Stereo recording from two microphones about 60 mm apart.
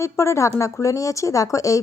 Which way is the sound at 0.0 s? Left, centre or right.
Left.